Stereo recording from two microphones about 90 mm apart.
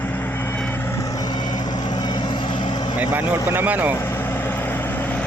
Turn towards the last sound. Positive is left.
turn(degrees=-20)  # may be behind; listen again after turning